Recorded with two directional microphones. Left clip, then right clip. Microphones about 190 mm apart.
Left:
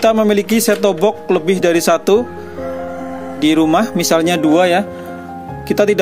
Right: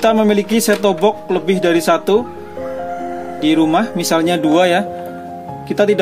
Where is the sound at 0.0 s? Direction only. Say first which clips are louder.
Left 1 dB; 35° left (ahead or behind).